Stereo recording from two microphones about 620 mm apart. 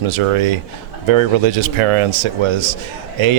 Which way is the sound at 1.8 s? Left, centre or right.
Right.